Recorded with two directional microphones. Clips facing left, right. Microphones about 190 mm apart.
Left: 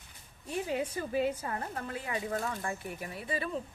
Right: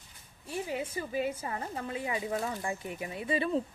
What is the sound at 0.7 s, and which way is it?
A woman's voice, 10° right (ahead or behind).